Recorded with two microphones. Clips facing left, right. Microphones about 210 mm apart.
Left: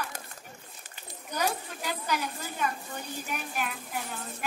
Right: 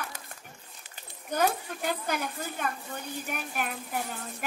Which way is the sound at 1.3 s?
50° right (ahead or behind).